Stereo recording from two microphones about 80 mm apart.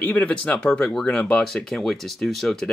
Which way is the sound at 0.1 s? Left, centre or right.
Centre.